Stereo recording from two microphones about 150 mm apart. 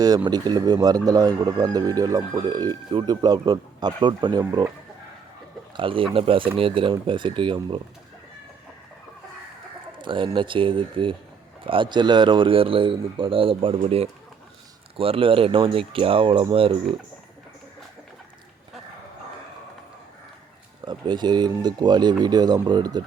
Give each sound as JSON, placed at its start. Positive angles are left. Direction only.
{"t": 0.3, "sound": "speech", "side_deg": -25}
{"t": 5.7, "sound": "a man's voice", "side_deg": -35}
{"t": 10.0, "sound": "a man's voice", "side_deg": -35}
{"t": 20.8, "sound": "speech", "side_deg": -30}